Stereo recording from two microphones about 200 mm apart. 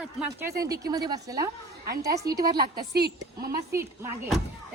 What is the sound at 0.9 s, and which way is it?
A woman's voice, 20° right (ahead or behind).